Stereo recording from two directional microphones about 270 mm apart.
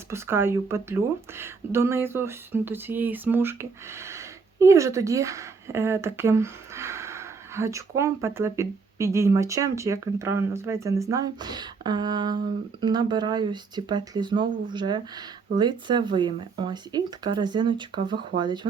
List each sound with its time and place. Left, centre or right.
0.1 s speech: centre